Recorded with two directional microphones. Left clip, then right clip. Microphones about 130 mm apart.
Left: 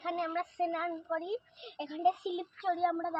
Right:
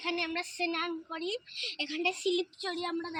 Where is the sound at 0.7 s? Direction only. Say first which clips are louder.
Left 1 dB; 15° left (ahead or behind).